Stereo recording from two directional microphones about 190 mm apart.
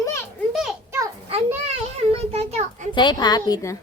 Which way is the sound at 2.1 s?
35° right (ahead or behind).